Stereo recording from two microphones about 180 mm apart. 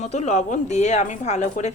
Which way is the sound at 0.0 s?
40° left (ahead or behind).